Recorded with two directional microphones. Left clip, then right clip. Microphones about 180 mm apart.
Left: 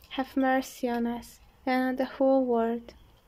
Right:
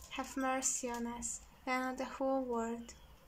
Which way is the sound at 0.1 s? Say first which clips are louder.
Left 10 dB; 25° left (ahead or behind).